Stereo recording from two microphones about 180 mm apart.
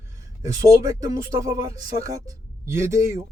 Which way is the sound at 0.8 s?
20° right (ahead or behind).